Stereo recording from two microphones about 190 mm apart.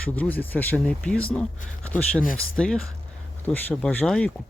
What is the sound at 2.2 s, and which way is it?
Speech, 45° left (ahead or behind).